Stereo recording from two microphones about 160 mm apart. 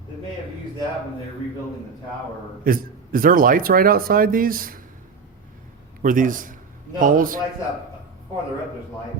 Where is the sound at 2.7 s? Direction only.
60° right (ahead or behind).